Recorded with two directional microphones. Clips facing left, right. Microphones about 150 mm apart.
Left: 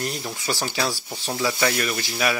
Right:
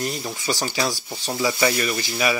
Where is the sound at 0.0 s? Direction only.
Centre (ahead or behind).